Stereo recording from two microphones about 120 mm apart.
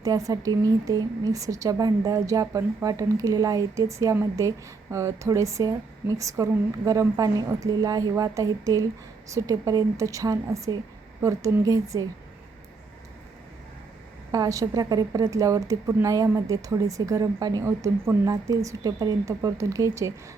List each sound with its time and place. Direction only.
0.0 s a woman's voice: 30° right (ahead or behind)
14.3 s a woman's voice: 30° right (ahead or behind)